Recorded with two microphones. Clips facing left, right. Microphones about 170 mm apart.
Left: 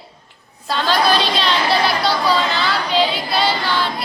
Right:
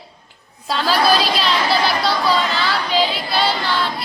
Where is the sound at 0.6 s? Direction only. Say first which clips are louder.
Even; 5° right (ahead or behind).